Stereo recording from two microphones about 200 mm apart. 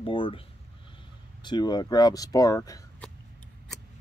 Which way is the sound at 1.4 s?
20° left (ahead or behind).